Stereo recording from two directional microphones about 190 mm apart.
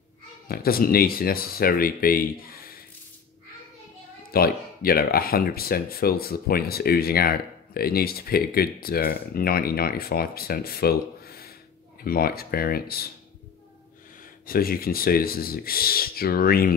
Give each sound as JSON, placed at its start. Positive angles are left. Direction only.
{"t": 0.5, "sound": "speech", "side_deg": 50}
{"t": 4.3, "sound": "speech", "side_deg": 50}
{"t": 14.4, "sound": "speech", "side_deg": 50}